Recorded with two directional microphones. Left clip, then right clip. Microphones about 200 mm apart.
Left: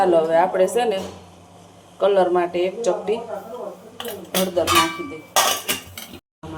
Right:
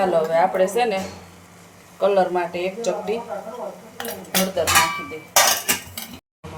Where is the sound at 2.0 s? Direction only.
10° left (ahead or behind).